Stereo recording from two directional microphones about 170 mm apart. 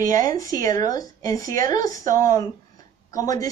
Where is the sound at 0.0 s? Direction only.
20° left (ahead or behind).